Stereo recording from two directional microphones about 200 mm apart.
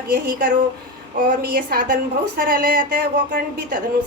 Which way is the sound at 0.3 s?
45° right (ahead or behind).